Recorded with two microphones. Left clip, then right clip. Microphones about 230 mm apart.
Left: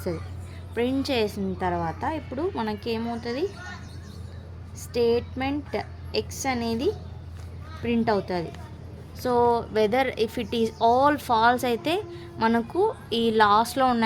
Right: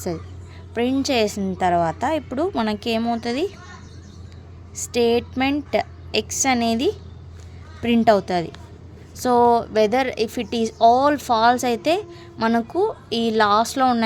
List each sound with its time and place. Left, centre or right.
0.7 s a woman's voice: right
4.7 s a woman's voice: right